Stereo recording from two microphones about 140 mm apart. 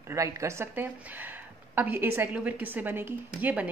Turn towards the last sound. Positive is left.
turn(degrees=-10)  # may be behind; listen again after turning